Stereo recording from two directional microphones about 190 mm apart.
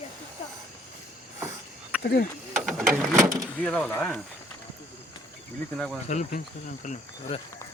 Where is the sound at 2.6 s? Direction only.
Centre (ahead or behind).